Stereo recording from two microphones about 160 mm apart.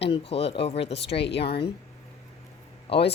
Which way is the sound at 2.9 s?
35° left (ahead or behind).